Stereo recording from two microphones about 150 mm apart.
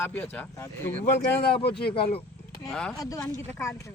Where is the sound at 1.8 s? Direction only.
35° left (ahead or behind).